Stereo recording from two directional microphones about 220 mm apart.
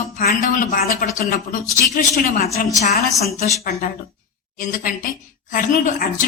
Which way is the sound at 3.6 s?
45° left (ahead or behind).